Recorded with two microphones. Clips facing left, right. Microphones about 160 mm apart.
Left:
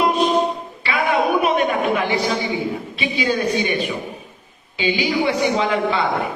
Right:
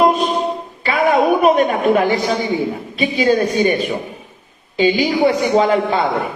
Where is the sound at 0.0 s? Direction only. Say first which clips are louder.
Right 4 dB; 45° right (ahead or behind).